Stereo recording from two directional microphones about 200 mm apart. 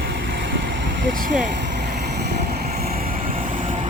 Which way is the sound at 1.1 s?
40° right (ahead or behind).